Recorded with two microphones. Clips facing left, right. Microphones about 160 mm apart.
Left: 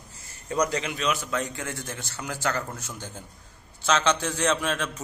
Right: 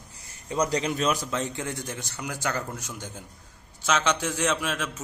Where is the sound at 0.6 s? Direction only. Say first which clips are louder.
Right 1 dB; 35° right (ahead or behind).